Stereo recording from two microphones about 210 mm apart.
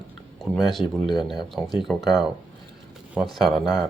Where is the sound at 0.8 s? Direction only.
20° left (ahead or behind).